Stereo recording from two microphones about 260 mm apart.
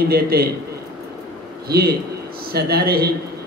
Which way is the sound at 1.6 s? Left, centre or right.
Right.